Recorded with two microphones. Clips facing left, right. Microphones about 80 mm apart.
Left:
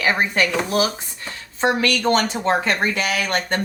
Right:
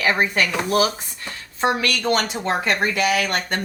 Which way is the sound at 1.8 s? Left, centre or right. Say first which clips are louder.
Left 3 dB; left.